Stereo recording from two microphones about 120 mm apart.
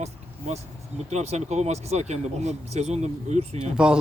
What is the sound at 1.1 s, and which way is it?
Speech, 70° right (ahead or behind).